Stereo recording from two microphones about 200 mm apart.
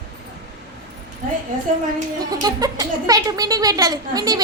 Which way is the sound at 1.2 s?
40° right (ahead or behind).